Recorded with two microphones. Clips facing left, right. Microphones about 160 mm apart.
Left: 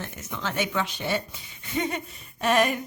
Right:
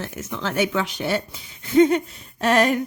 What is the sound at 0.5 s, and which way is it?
Speech, 85° right.